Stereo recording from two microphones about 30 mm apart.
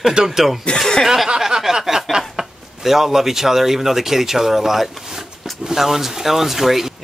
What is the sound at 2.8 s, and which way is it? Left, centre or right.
Speech, centre.